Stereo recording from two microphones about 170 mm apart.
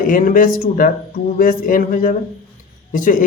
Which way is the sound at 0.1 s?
50° left (ahead or behind).